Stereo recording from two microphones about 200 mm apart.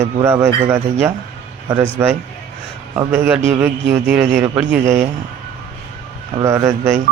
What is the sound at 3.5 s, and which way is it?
A man's voice, 10° right (ahead or behind).